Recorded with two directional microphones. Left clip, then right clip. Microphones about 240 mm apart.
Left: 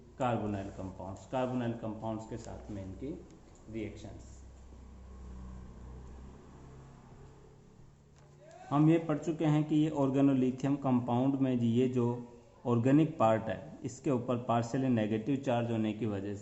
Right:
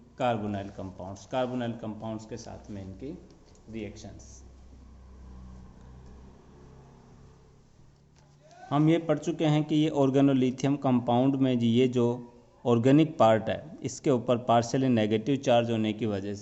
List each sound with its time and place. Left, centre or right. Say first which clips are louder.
0.2 s a man's voice: right 5 dB; right
8.7 s a man's voice: right 4 dB; right